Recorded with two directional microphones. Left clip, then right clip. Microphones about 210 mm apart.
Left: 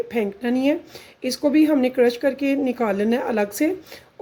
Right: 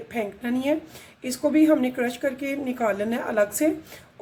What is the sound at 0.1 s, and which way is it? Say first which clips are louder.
A woman's voice: left 5 dB; 45° left (ahead or behind).